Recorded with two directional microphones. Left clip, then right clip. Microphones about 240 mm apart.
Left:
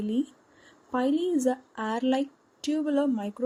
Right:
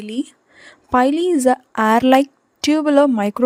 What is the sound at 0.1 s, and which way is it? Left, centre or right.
A woman's voice, right.